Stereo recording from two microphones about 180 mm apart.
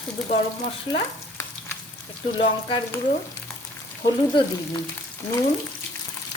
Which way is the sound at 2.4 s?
30° left (ahead or behind).